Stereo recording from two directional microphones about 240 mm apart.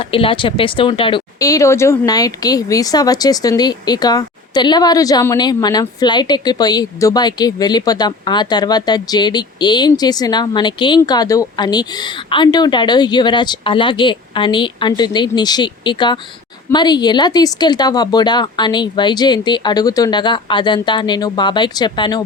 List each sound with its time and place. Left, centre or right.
0.1 s speech: left